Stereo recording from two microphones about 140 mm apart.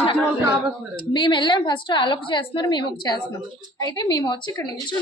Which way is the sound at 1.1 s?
35° left (ahead or behind).